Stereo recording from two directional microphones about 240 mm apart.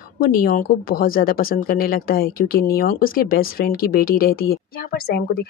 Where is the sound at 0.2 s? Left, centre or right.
Left.